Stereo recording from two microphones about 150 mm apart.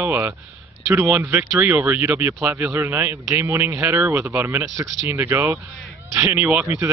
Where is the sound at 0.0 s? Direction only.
15° right (ahead or behind).